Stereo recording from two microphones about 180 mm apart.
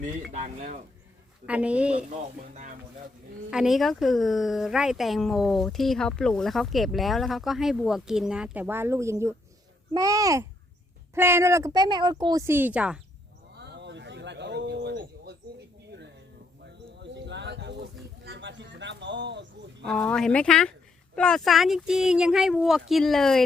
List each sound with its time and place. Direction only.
0.0 s speech: 45° right (ahead or behind)
1.5 s speech: 5° right (ahead or behind)
3.5 s a child's voice: centre (ahead or behind)
13.6 s a sound: 75° right (ahead or behind)
17.0 s a sound: 75° right (ahead or behind)
18.3 s bird: 80° right
19.8 s speech: 5° left (ahead or behind)